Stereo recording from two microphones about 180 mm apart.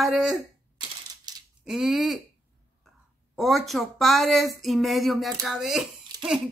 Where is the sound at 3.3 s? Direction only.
Centre (ahead or behind).